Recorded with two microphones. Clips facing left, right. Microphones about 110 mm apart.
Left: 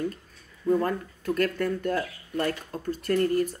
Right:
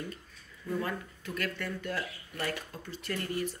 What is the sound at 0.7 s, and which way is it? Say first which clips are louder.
Speech: left 10 dB; 50° left (ahead or behind).